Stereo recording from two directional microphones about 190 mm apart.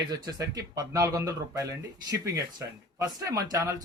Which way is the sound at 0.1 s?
20° right (ahead or behind).